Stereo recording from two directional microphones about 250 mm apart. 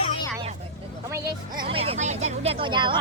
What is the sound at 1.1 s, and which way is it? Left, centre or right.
Speech, centre.